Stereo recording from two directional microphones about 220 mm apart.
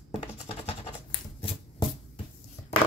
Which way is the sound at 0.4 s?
25° left (ahead or behind).